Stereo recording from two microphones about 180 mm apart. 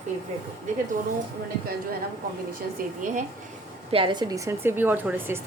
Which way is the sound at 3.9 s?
25° right (ahead or behind).